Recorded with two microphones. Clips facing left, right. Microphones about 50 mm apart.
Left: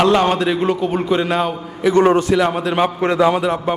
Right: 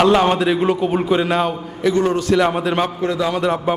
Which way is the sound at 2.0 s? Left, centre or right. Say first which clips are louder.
Left 5 dB; left.